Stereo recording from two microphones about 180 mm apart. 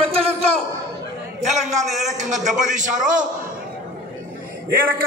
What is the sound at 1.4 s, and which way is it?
A man's voice, 40° right (ahead or behind).